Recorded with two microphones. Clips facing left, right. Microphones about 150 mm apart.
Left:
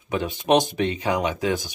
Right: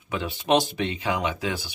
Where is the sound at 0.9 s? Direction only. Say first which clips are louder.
Left 1 dB; 40° left (ahead or behind).